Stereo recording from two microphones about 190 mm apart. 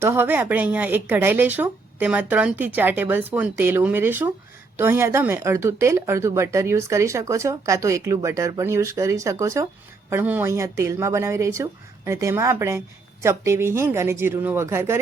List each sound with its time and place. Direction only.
0.0 s speech: 10° right (ahead or behind)